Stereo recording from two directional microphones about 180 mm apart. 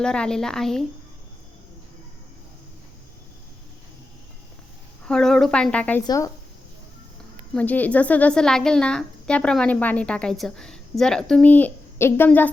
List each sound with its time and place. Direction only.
0.0 s a woman's voice: 5° left (ahead or behind)
5.0 s a woman's voice: 5° left (ahead or behind)
6.1 s speech: 20° left (ahead or behind)
7.5 s a woman's voice: 10° left (ahead or behind)